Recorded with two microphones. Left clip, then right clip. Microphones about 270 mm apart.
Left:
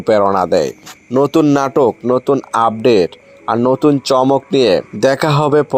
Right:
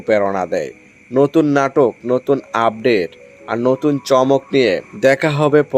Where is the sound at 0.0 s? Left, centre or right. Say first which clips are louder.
Left 4 dB; left.